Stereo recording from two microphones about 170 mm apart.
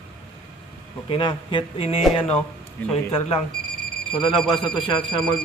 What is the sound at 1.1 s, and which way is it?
Speech, 30° left (ahead or behind).